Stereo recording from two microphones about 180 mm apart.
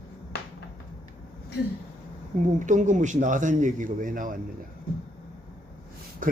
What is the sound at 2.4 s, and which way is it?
Speech, 45° right (ahead or behind).